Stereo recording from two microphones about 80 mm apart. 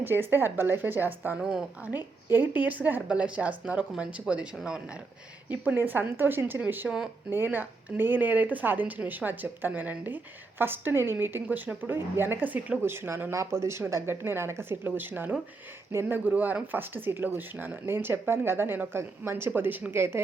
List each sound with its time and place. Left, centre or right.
0.0 s speech: right
5.5 s speech: right